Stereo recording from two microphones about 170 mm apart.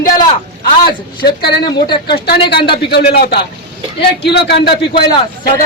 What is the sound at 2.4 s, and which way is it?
Speech, 30° left (ahead or behind).